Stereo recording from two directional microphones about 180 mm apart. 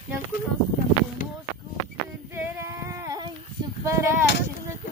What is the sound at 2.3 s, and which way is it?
Female singing, 15° right (ahead or behind).